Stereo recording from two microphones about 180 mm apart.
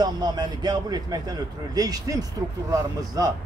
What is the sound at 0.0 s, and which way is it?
Speech, 20° right (ahead or behind).